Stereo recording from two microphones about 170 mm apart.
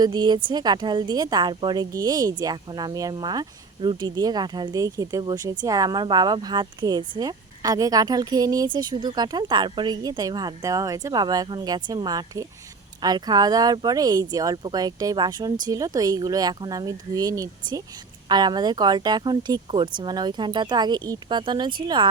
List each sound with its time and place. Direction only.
0.0 s a woman's voice: 25° right (ahead or behind)